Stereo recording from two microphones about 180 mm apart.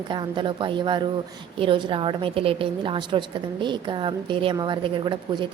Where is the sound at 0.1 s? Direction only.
25° right (ahead or behind).